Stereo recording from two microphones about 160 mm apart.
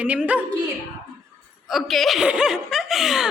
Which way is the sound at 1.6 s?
Centre (ahead or behind).